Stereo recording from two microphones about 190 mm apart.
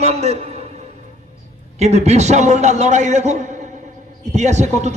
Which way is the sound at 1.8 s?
35° right (ahead or behind).